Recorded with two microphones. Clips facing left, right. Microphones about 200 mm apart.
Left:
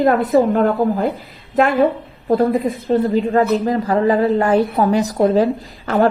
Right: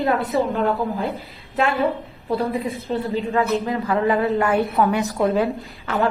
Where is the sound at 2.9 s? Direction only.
40° left (ahead or behind).